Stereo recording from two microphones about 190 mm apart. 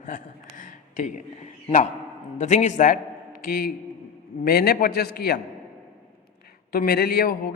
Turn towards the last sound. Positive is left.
turn(degrees=55)  # may be behind; listen again after turning